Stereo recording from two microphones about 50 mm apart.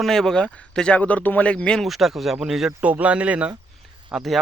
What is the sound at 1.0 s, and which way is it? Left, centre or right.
Speech, left.